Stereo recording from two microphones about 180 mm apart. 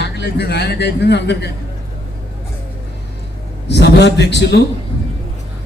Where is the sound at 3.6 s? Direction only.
70° left (ahead or behind).